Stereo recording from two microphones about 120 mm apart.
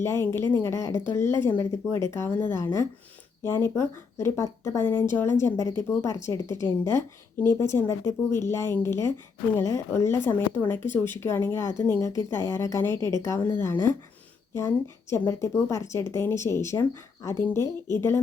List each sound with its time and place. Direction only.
0.0 s speech: 20° left (ahead or behind)
15.3 s speech: 25° left (ahead or behind)